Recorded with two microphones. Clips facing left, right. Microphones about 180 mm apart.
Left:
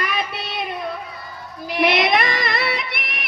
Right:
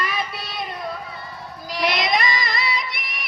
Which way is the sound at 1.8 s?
60° left (ahead or behind).